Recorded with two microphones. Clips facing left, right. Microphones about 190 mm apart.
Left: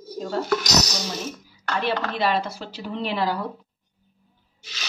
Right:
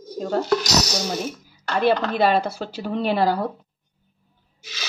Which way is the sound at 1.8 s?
50° right (ahead or behind).